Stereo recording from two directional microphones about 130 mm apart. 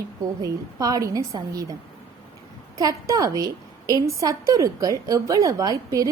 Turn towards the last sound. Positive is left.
turn(degrees=-25)  # may be behind; listen again after turning